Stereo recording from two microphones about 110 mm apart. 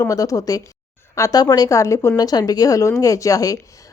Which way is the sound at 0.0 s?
30° left (ahead or behind).